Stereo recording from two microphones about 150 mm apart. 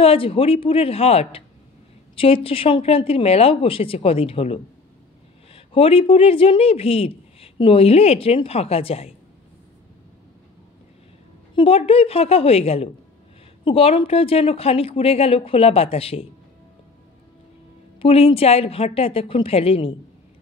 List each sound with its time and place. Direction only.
0.0 s speech: 40° left (ahead or behind)
11.5 s speech: 40° left (ahead or behind)
18.0 s speech: 40° left (ahead or behind)